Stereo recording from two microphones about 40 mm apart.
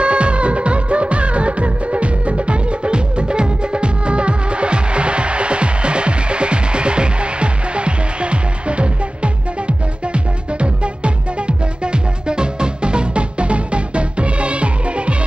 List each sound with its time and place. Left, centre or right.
0.0 s music: right